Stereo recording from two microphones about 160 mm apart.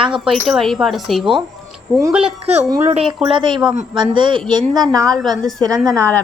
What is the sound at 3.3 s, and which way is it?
Speech, 30° right (ahead or behind).